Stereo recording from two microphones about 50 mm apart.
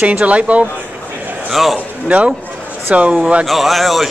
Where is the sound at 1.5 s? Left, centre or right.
Centre.